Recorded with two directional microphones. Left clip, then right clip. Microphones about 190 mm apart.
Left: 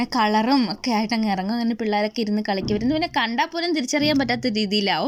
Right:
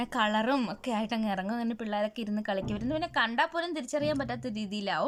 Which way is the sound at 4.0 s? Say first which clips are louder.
Left 8 dB; 10° left (ahead or behind).